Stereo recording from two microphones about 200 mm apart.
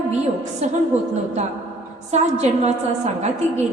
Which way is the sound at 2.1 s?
35° right (ahead or behind).